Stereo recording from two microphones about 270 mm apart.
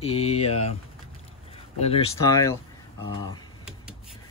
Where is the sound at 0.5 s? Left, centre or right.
Left.